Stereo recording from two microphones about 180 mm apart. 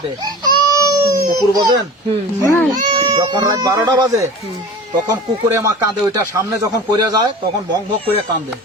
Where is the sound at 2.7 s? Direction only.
40° right (ahead or behind).